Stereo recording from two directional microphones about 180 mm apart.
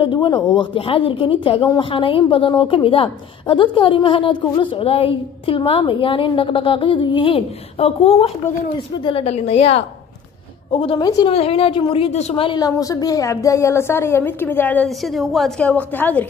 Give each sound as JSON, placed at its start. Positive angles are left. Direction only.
{"t": 0.0, "sound": "a woman's voice", "side_deg": 25}
{"t": 11.3, "sound": "a woman's voice", "side_deg": 30}